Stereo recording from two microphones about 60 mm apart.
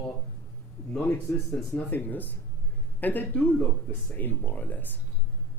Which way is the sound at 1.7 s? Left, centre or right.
Left.